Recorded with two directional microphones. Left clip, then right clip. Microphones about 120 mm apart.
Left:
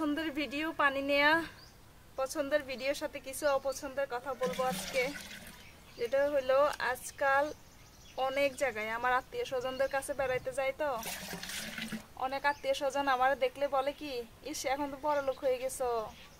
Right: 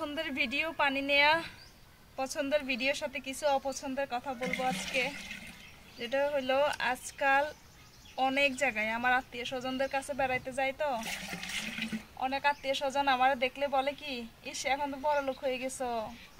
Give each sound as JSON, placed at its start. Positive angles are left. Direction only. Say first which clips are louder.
{"t": 0.0, "sound": "a woman's voice", "louder": "right 1 dB", "side_deg": 30}
{"t": 2.1, "sound": "speech", "louder": "right 1 dB", "side_deg": 45}
{"t": 4.6, "sound": "a woman's voice", "louder": "right 4 dB", "side_deg": 25}
{"t": 11.0, "sound": "speech", "louder": "right 3 dB", "side_deg": 25}
{"t": 12.2, "sound": "a woman's voice", "louder": "right 2 dB", "side_deg": 45}